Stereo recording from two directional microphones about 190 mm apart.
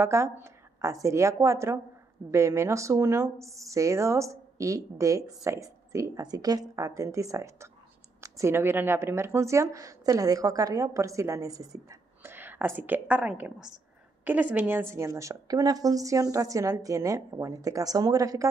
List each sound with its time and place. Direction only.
0.0 s speech: 15° right (ahead or behind)